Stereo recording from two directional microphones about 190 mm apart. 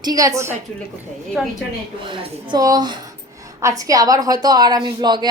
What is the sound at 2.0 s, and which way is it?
A woman's voice, 25° right (ahead or behind).